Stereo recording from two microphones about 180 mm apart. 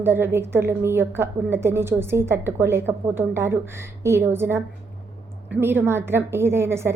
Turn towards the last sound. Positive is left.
turn(degrees=-15)  # may be behind; listen again after turning